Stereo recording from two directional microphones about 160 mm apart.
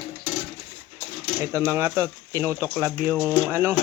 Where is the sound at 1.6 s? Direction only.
15° right (ahead or behind).